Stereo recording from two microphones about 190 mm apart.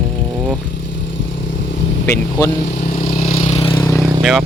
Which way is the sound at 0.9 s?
70° left (ahead or behind).